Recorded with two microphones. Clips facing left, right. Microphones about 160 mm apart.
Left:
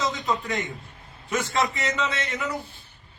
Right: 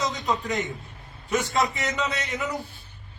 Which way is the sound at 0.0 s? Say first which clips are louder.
Even; 15° right (ahead or behind).